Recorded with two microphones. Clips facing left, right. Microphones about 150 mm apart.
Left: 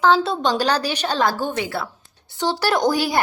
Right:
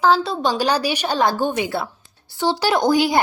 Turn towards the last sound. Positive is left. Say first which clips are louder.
# right 2 dB
turn(degrees=-15)  # may be behind; listen again after turning